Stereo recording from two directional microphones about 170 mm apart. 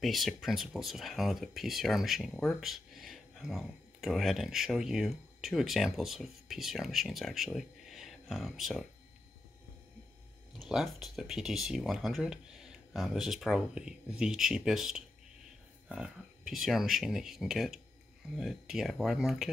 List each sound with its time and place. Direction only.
0.0 s speech: centre (ahead or behind)
10.6 s speech: centre (ahead or behind)